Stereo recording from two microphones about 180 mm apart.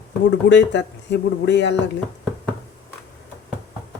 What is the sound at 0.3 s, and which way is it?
Speech, 80° left.